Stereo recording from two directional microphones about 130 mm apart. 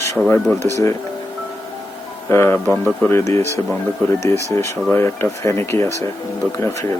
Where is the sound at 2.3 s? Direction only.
20° left (ahead or behind).